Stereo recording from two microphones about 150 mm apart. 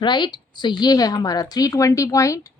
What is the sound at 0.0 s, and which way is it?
Speech, 30° left (ahead or behind).